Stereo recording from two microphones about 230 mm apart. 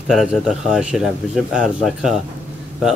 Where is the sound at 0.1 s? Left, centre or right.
Centre.